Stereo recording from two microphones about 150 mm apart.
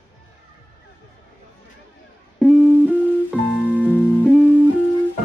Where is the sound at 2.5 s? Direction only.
10° right (ahead or behind).